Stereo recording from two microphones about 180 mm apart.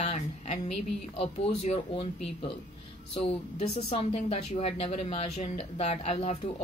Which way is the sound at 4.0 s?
35° left (ahead or behind).